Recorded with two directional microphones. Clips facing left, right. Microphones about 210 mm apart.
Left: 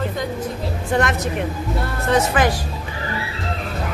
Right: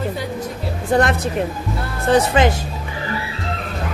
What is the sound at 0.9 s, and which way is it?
Speech, 35° right (ahead or behind).